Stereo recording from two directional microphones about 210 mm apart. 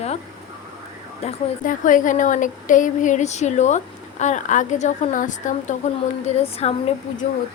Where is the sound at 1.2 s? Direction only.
35° left (ahead or behind).